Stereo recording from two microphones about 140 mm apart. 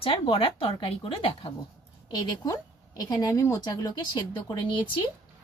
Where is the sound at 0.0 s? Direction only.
40° left (ahead or behind).